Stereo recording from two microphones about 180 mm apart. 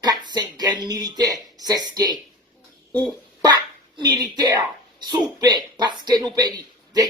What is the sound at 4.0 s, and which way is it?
Speech, 20° right (ahead or behind).